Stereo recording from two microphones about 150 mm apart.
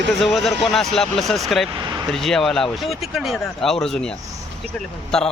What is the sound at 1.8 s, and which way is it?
Vehicle, 25° right (ahead or behind).